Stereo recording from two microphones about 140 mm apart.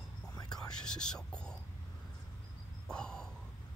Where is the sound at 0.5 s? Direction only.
5° left (ahead or behind).